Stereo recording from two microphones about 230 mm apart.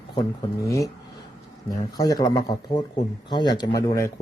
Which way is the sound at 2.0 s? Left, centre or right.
Centre.